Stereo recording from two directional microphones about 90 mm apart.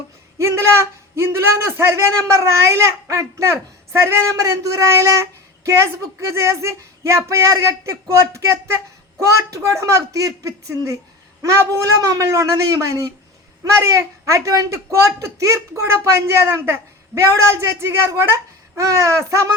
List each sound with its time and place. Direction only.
0.3 s a man's voice: 30° right (ahead or behind)